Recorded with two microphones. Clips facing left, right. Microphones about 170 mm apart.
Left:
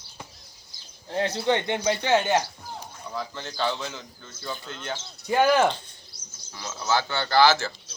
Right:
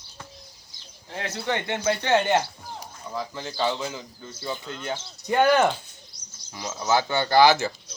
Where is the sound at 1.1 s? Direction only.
30° left (ahead or behind).